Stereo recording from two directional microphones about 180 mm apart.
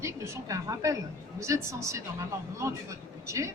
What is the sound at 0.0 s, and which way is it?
A man's voice, 15° right (ahead or behind).